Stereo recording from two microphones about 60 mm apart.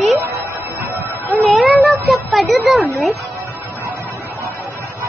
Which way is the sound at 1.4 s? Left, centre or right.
Centre.